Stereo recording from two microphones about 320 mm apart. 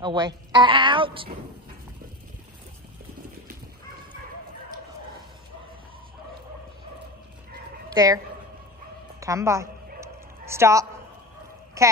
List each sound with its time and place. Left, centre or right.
0.0 s a woman's voice: centre
7.9 s speech: centre
9.2 s a woman's voice: centre
9.9 s dog: centre
11.8 s a woman's voice: centre